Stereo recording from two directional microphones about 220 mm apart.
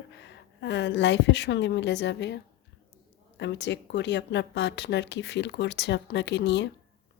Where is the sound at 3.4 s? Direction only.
55° left (ahead or behind).